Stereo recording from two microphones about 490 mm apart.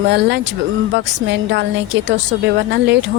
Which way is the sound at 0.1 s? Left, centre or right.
Right.